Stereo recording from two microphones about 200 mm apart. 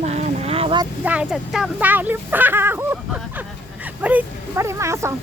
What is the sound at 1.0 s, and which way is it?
Speech, 5° right (ahead or behind).